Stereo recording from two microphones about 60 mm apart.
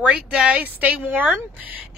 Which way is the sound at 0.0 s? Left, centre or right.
Right.